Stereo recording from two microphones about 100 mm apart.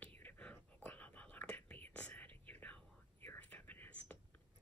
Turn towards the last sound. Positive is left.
turn(degrees=15)  # may be behind; listen again after turning